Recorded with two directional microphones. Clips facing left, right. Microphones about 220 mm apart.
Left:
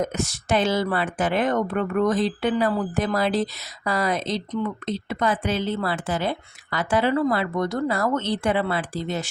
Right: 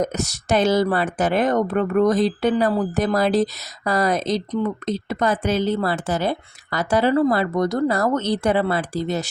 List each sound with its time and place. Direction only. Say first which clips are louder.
0.0 s speech: right 2 dB; 40° right (ahead or behind)